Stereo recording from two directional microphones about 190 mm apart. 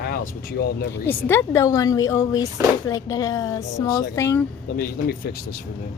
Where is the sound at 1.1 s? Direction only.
10° left (ahead or behind).